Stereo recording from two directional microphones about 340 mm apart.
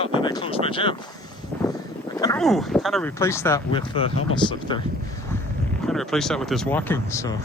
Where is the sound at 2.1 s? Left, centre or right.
Centre.